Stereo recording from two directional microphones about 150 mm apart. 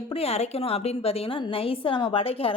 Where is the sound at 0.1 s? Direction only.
40° left (ahead or behind).